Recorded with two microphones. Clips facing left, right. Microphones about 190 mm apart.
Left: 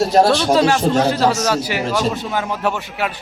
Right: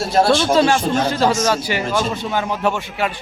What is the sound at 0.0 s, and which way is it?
Speech, 40° left (ahead or behind).